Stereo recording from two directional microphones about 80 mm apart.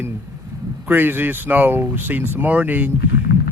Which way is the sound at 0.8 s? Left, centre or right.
Right.